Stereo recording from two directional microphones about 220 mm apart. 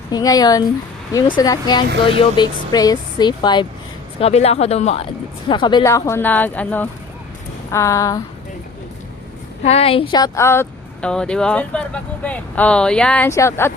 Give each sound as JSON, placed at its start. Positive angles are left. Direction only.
{"t": 0.1, "sound": "speech", "side_deg": 15}
{"t": 9.6, "sound": "speech", "side_deg": 25}